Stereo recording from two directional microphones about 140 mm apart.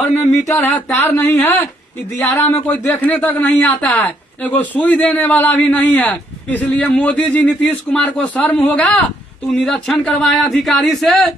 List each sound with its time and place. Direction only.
0.5 s speech: 15° left (ahead or behind)